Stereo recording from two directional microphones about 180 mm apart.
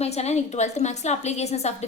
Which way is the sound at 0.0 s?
35° left (ahead or behind).